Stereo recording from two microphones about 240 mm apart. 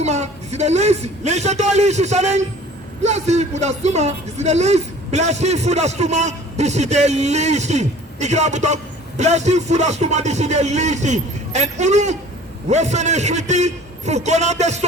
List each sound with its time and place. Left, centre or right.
0.0 s speech: right